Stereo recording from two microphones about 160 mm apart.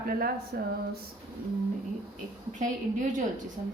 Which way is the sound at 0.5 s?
80° right.